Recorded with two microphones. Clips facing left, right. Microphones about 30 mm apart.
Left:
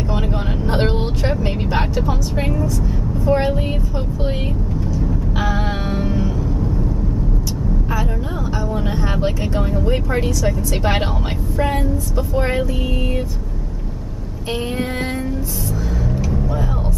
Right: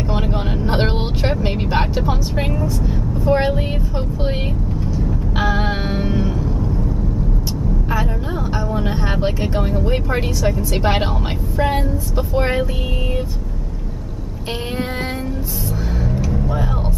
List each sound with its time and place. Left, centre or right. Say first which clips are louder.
0.1 s vehicle: right 2 dB; centre
4.9 s vehicle: right 1 dB; right
8.7 s vehicle: right 1 dB; centre